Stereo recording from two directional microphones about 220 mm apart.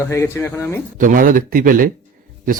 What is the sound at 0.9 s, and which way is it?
Speech, 40° right (ahead or behind).